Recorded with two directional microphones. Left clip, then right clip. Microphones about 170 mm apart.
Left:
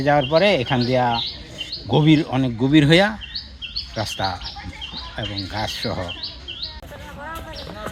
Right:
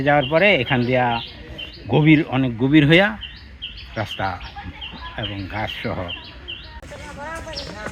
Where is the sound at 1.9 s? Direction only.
15° left (ahead or behind).